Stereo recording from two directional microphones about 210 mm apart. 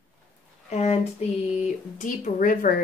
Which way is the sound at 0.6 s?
30° left (ahead or behind).